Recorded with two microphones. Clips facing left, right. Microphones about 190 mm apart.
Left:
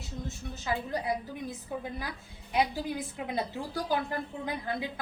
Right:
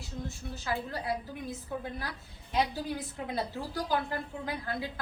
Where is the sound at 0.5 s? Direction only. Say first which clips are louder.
Left 3 dB; 15° left (ahead or behind).